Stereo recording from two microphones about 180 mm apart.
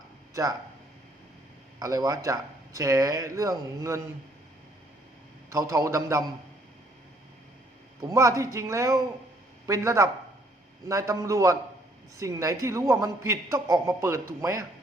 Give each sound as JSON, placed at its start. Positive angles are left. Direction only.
{"t": 1.8, "sound": "speech", "side_deg": -20}
{"t": 5.5, "sound": "a man's voice", "side_deg": -15}
{"t": 8.0, "sound": "a man's voice", "side_deg": -15}